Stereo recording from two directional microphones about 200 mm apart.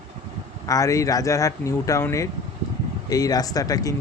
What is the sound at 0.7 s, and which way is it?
Speech, 15° left (ahead or behind).